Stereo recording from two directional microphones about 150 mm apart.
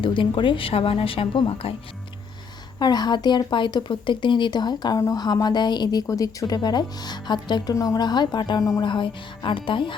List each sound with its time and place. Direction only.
0.0 s speech: 35° left (ahead or behind)
2.7 s speech: 25° left (ahead or behind)